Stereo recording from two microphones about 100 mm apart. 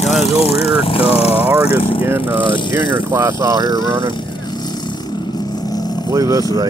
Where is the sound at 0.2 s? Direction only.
80° left.